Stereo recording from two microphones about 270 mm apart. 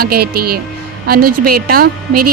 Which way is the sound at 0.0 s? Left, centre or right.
Right.